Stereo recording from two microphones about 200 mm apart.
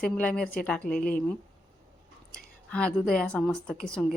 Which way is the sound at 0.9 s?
45° left (ahead or behind).